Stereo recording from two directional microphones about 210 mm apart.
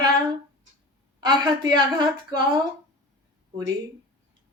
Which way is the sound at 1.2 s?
20° right (ahead or behind).